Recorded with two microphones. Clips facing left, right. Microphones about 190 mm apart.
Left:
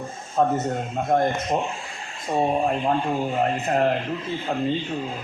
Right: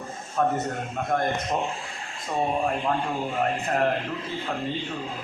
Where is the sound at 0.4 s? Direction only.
30° left (ahead or behind).